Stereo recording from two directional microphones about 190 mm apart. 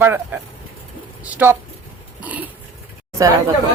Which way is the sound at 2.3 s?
10° right (ahead or behind).